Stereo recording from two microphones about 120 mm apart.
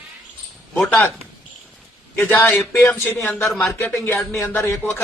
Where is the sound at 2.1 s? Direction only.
20° left (ahead or behind).